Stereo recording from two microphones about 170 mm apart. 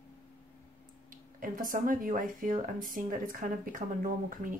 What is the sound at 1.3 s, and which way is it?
Speech, 55° right (ahead or behind).